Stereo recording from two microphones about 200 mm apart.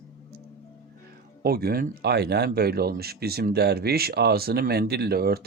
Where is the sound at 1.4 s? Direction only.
50° right (ahead or behind).